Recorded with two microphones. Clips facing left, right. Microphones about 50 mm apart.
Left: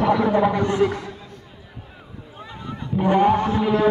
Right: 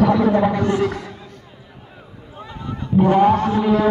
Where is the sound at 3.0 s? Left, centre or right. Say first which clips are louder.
Right 2 dB; centre.